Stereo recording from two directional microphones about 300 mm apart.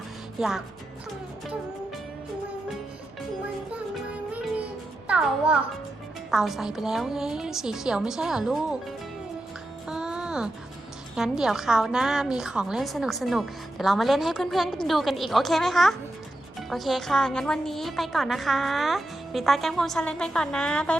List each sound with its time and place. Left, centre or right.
0.3 s speech: centre
3.2 s music: centre
6.3 s a woman's voice: centre
9.8 s music: centre
11.1 s a woman's voice: centre